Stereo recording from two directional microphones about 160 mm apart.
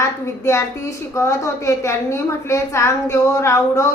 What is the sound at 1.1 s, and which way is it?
A woman's voice, 20° left (ahead or behind).